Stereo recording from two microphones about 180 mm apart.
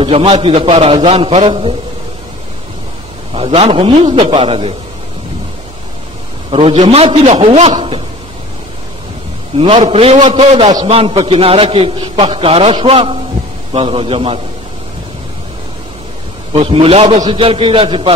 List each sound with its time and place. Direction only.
0.0 s a man's voice: 35° right (ahead or behind)
3.3 s a man's voice: 35° right (ahead or behind)
6.5 s a man's voice: 30° right (ahead or behind)
9.6 s a man's voice: 30° right (ahead or behind)
16.5 s a man's voice: 30° right (ahead or behind)